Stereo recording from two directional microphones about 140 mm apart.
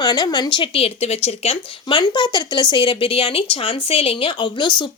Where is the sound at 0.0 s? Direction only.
30° left (ahead or behind).